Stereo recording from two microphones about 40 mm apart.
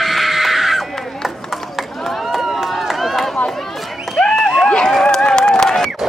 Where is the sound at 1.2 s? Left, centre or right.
Centre.